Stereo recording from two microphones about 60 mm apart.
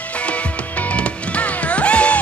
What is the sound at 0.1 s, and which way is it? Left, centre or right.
Music, left.